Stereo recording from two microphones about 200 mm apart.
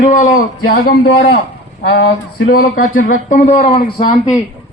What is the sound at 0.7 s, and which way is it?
A man's voice, 50° left (ahead or behind).